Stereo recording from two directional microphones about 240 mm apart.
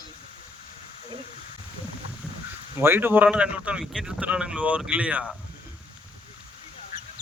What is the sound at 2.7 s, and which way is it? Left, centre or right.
Speech, centre.